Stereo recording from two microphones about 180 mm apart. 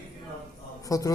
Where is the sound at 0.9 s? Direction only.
20° left (ahead or behind).